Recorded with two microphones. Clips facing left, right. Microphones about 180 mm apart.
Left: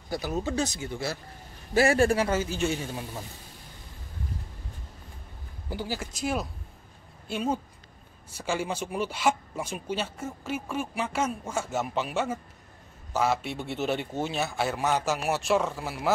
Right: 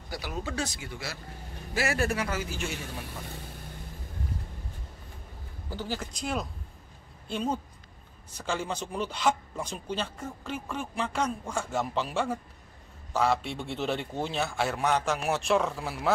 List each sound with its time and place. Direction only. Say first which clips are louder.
0.2 s speech: left 4 dB; 40° left (ahead or behind)
0.5 s a man's voice: left 5 dB; 20° left (ahead or behind)
5.7 s a man's voice: left 1 dB; 10° left (ahead or behind)